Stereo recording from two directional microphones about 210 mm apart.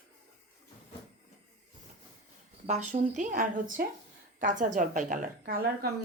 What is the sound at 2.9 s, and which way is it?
A woman's voice, 35° right (ahead or behind).